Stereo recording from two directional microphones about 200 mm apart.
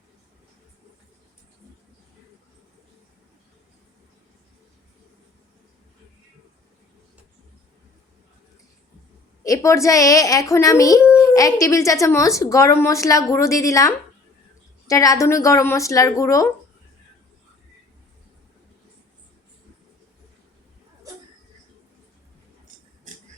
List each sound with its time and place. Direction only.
9.4 s a woman's voice: 15° left (ahead or behind)